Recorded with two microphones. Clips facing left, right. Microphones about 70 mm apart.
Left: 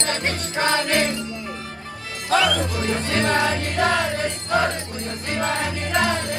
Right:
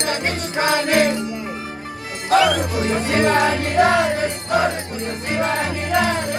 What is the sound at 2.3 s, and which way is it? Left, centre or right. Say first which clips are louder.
Music: right 4 dB; centre.